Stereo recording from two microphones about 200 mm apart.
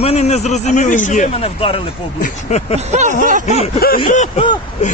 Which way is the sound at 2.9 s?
35° right (ahead or behind).